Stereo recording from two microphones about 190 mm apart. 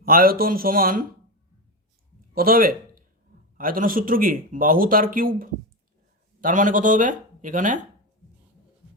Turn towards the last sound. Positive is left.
turn(degrees=-45)  # may be behind; listen again after turning